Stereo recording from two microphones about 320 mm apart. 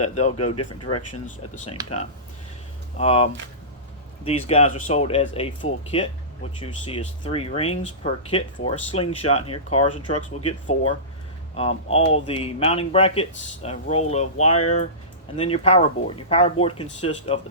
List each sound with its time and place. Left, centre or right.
0.1 s speech: left
0.3 s speech: left
3.0 s speech: centre